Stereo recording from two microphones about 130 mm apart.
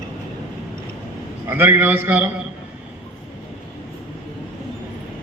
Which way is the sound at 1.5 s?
15° right (ahead or behind).